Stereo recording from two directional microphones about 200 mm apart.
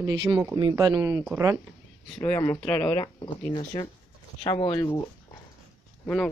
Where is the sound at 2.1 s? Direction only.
10° left (ahead or behind).